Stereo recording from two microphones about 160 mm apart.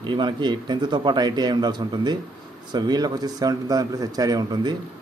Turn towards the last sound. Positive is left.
turn(degrees=-25)  # may be behind; listen again after turning